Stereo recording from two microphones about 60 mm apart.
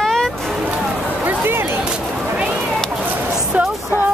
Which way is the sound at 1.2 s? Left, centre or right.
Right.